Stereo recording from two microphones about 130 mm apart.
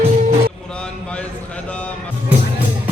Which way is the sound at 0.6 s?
5° left (ahead or behind).